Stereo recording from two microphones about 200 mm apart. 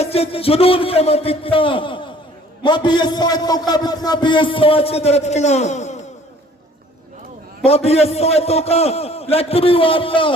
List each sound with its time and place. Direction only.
0.0 s a man's voice: 30° left (ahead or behind)
7.6 s a man's voice: 30° left (ahead or behind)